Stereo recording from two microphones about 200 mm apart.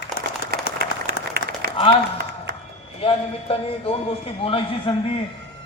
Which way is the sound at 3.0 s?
25° left (ahead or behind).